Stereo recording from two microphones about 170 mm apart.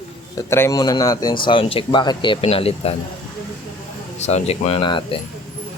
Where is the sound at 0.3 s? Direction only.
15° left (ahead or behind); by 2.9 s 35° left (ahead or behind).